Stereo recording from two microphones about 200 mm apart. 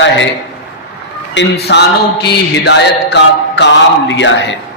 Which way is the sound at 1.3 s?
60° left (ahead or behind).